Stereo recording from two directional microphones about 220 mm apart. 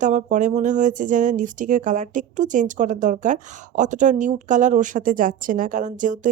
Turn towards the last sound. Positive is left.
turn(degrees=-35)  # may be behind; listen again after turning